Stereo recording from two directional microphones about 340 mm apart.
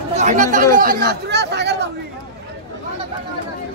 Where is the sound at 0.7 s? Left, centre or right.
Right.